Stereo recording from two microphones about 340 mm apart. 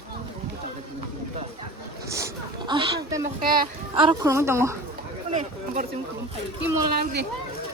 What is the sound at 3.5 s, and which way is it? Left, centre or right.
A child's voice, centre.